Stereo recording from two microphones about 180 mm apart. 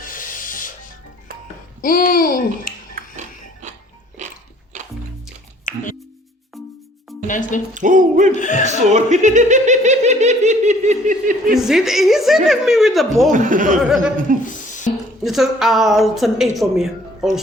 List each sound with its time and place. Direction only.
0.0 s music: 50° left (ahead or behind)
1.8 s babbling: 55° left (ahead or behind)
2.9 s music: 40° right (ahead or behind)
5.7 s music: 45° left (ahead or behind)
7.3 s speech: 45° left (ahead or behind)
7.7 s music: 45° right (ahead or behind)
8.4 s speech: 45° left (ahead or behind)
8.9 s speech: 40° right (ahead or behind)
11.5 s a woman's voice: centre (ahead or behind)
13.3 s music: 45° right (ahead or behind)
13.8 s a woman's voice: 5° right (ahead or behind)
14.4 s a sound: 45° left (ahead or behind)
15.2 s a woman's voice: centre (ahead or behind)